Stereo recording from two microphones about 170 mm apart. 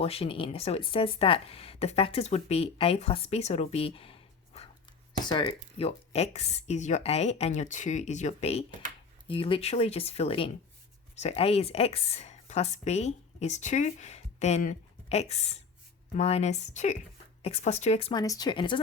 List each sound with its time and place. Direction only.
0.0 s speech: 35° left (ahead or behind)
18.1 s speech: 20° left (ahead or behind)